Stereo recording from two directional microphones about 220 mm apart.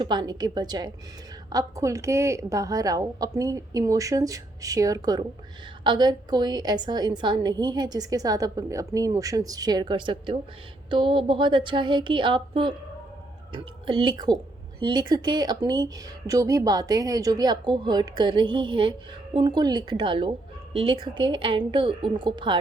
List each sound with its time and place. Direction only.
0.0 s a woman's voice: 20° right (ahead or behind)